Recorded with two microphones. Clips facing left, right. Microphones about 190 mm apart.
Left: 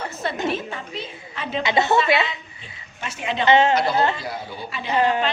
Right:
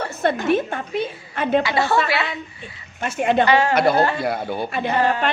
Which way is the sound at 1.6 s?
20° left (ahead or behind).